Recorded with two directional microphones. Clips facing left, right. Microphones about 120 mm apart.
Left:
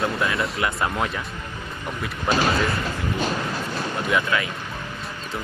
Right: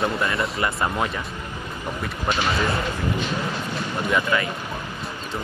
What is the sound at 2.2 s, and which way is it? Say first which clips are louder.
Speech: left 3 dB; 40° left (ahead or behind).